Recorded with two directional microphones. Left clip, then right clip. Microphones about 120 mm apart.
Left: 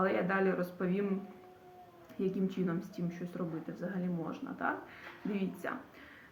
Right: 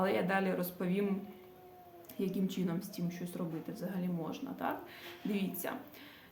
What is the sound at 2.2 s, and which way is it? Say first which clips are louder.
Speech: left 2 dB; 40° right (ahead or behind).